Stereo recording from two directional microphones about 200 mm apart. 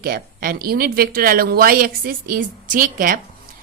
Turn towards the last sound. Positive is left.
turn(degrees=-45)  # may be behind; listen again after turning